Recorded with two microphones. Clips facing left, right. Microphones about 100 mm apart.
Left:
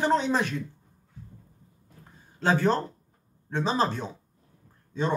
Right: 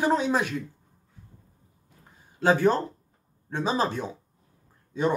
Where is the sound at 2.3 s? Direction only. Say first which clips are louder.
Right 2 dB; 15° right (ahead or behind).